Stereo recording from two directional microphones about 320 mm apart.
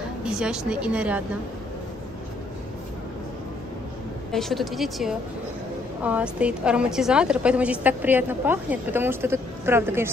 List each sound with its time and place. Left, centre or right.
0.2 s a woman's voice: centre
4.3 s a woman's voice: centre